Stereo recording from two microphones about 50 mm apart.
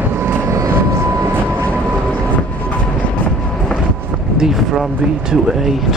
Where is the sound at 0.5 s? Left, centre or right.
Right.